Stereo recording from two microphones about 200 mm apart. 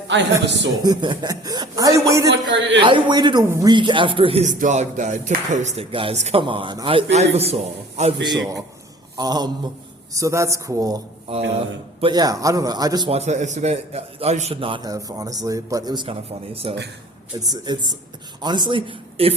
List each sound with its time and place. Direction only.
0.1 s a man's voice: 65° right (ahead or behind)
0.8 s a man's voice: 20° right (ahead or behind)
2.6 s a man's voice: 65° right (ahead or behind)
2.8 s a man's voice: 20° right (ahead or behind)
8.2 s a man's voice: 20° right (ahead or behind)
13.1 s a man's voice: 35° right (ahead or behind)